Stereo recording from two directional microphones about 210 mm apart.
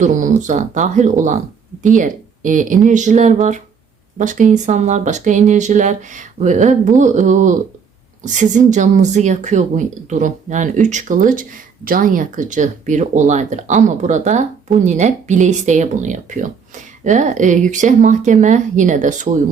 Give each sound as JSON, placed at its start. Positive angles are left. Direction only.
{"t": 0.0, "sound": "speech", "side_deg": -40}